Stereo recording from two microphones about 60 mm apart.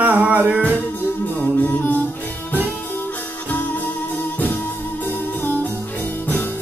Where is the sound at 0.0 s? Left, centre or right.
Right.